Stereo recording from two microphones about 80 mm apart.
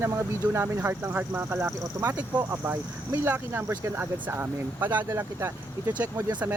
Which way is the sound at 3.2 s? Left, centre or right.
Right.